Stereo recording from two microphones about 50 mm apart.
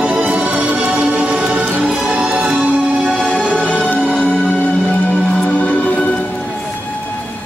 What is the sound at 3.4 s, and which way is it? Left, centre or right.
Music, left.